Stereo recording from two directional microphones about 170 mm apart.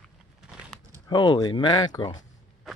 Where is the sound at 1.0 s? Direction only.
25° left (ahead or behind).